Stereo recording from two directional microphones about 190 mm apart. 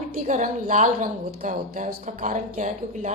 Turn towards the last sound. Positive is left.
turn(degrees=-40)  # may be behind; listen again after turning